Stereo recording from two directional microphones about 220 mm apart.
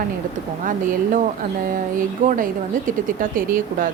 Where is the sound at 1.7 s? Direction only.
40° right (ahead or behind).